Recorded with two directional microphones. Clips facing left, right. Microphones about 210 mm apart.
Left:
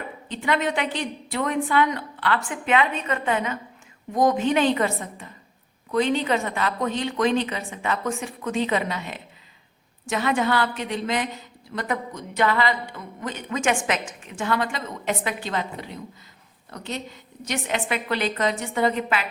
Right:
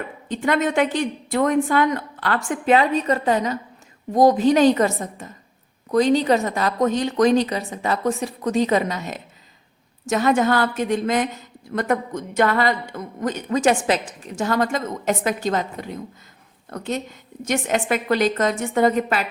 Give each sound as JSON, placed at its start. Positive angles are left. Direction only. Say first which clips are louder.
{"t": 0.3, "sound": "a woman's voice", "louder": "right 4 dB", "side_deg": -45}